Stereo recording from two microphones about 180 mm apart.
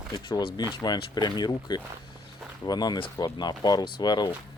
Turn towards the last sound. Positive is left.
turn(degrees=25)  # may be behind; listen again after turning